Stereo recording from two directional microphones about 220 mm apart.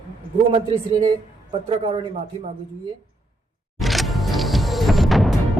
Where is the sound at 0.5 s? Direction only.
25° right (ahead or behind).